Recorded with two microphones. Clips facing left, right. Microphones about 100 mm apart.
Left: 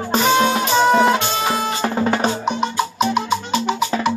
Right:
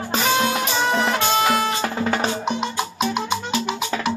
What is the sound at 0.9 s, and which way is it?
Music, 10° left (ahead or behind).